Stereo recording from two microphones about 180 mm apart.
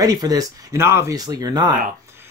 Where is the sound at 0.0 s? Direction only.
20° right (ahead or behind).